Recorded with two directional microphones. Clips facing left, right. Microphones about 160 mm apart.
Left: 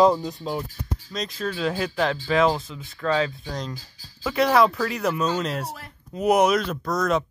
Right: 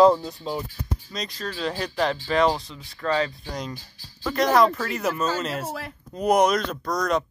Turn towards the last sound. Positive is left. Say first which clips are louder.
# left 1 dB
turn(degrees=5)  # may be behind; listen again after turning